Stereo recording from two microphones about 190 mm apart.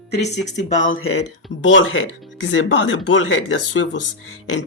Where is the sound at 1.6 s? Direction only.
85° left.